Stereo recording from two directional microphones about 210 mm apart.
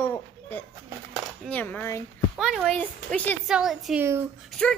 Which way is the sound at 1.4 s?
5° left (ahead or behind).